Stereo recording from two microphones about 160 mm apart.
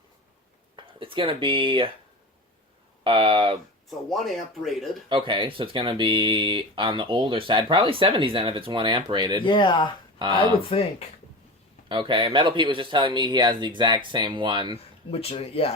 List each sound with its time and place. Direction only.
0.8 s speech: 30° right (ahead or behind)
3.0 s speech: 35° right (ahead or behind)
3.8 s speech: centre (ahead or behind)
5.0 s speech: 30° right (ahead or behind)
9.4 s speech: 30° left (ahead or behind)
11.9 s speech: 30° right (ahead or behind)
15.1 s speech: 35° left (ahead or behind)